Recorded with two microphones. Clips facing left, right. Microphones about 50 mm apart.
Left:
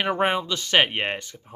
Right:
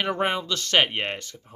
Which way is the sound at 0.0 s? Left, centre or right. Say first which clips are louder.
Left 2 dB; centre.